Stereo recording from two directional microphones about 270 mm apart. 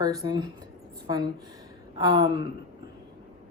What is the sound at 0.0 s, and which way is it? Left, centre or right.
Speech, centre.